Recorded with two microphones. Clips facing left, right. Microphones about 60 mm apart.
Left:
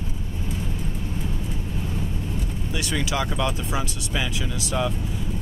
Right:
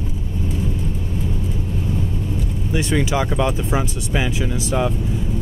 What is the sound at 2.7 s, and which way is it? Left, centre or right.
Speech, right.